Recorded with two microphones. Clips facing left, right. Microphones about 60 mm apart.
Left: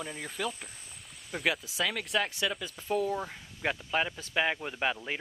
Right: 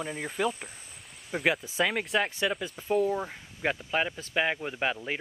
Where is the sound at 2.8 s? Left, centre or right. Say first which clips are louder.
Right 4 dB; centre.